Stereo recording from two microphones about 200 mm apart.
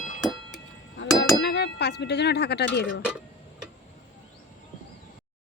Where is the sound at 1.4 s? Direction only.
55° left (ahead or behind).